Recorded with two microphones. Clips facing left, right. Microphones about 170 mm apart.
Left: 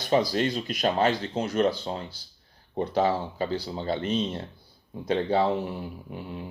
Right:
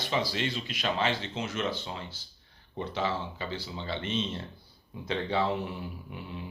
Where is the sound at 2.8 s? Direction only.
40° left (ahead or behind).